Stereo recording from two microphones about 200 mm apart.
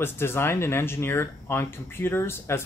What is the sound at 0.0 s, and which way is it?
Speech, 10° left (ahead or behind).